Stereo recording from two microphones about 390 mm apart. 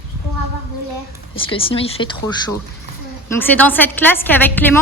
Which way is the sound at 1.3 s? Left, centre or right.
Centre.